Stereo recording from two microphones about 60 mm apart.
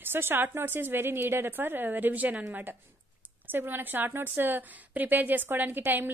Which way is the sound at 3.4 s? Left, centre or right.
Right.